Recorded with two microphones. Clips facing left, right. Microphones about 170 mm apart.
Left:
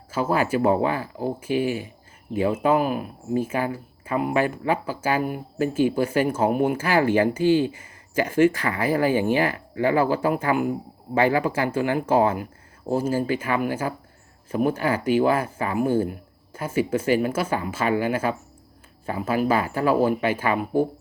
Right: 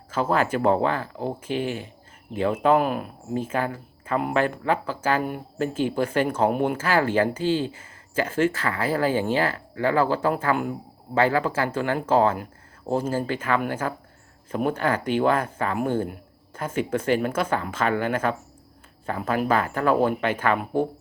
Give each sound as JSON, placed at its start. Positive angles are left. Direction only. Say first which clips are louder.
{"t": 0.1, "sound": "speech", "louder": "left 1 dB", "side_deg": 10}